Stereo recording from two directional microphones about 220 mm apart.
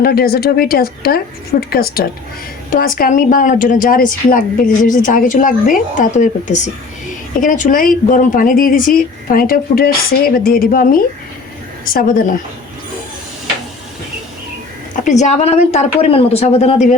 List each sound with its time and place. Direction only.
0.0 s a woman's voice: 45° left (ahead or behind)
15.0 s speech: 30° left (ahead or behind)